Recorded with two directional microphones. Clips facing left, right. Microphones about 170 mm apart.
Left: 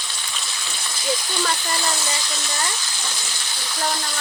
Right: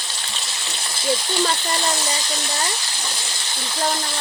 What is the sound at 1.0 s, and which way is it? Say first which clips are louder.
Speech: right 4 dB; 30° right (ahead or behind).